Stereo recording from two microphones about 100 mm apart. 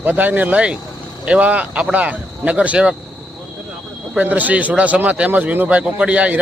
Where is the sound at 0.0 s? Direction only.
15° right (ahead or behind).